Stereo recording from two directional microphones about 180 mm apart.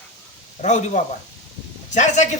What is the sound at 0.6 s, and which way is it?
Speech, 45° left (ahead or behind).